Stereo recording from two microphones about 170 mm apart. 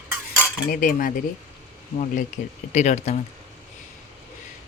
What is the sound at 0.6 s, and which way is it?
Speech, 55° left (ahead or behind).